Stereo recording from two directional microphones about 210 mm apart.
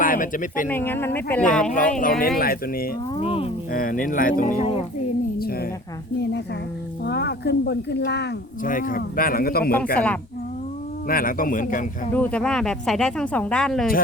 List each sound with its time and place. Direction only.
0.0 s speech: 40° left (ahead or behind)
0.7 s speech: 10° left (ahead or behind)
2.0 s speech: 45° left (ahead or behind)
3.2 s speech: 25° left (ahead or behind)
3.7 s a woman's voice: 40° left (ahead or behind)
7.0 s speech: 50° left (ahead or behind)
8.6 s speech: 40° left (ahead or behind)
10.0 s speech: 5° left (ahead or behind)
11.1 s speech: 45° left (ahead or behind)
12.1 s speech: 5° left (ahead or behind)